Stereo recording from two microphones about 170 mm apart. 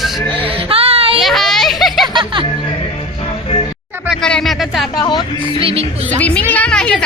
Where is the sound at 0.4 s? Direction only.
35° right (ahead or behind).